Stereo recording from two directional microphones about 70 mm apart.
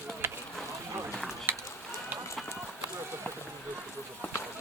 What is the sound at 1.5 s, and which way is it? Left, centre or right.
Run, right.